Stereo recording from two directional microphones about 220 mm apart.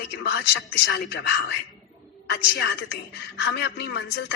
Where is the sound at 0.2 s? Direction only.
50° left (ahead or behind).